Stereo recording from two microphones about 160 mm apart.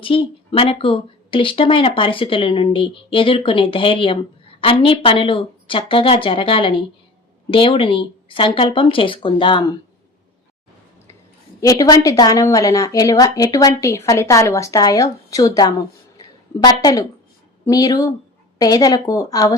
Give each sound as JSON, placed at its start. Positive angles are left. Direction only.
{"t": 0.0, "sound": "speech", "side_deg": 35}
{"t": 11.6, "sound": "a woman's voice", "side_deg": 20}
{"t": 16.1, "sound": "a sound", "side_deg": 25}
{"t": 17.7, "sound": "a woman's voice", "side_deg": 25}